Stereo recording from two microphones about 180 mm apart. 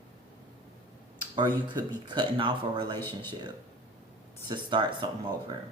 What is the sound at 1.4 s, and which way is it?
Speech, 25° right (ahead or behind).